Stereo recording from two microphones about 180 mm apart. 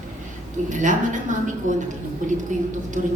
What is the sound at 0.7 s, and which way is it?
Speech, 45° right (ahead or behind).